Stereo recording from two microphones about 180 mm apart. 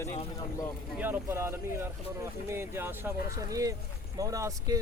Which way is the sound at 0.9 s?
10° right (ahead or behind).